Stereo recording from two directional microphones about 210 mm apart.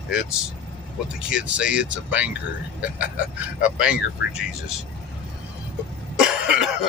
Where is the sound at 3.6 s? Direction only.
5° right (ahead or behind).